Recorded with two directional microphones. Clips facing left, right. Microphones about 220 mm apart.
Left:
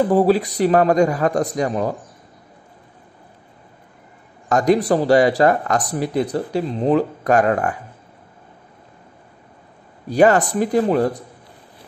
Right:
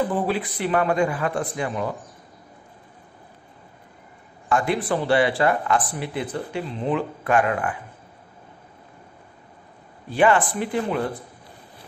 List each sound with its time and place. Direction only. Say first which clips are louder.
0.1 s speech: left 9 dB; 40° left (ahead or behind)
4.5 s speech: left 7 dB; 40° left (ahead or behind)
10.0 s speech: left 5 dB; 40° left (ahead or behind)